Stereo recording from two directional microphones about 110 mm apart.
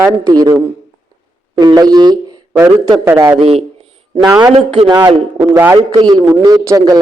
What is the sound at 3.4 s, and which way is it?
A man's voice, 65° right (ahead or behind).